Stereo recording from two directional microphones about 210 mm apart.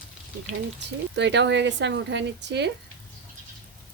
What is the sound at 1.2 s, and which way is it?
Speech, 55° right (ahead or behind).